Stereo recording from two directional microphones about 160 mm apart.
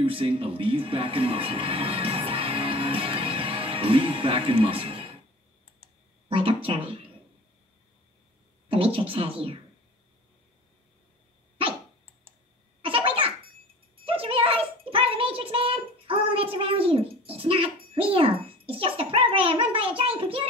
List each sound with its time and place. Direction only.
0.0 s speech: 35° right (ahead or behind)
6.2 s speech: 35° right (ahead or behind)
8.6 s speech: 35° right (ahead or behind)
12.8 s baby laughter: 35° right (ahead or behind)
14.0 s a sound: 35° right (ahead or behind)